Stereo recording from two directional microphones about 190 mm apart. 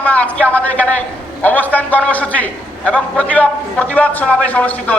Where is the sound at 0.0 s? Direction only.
5° left (ahead or behind).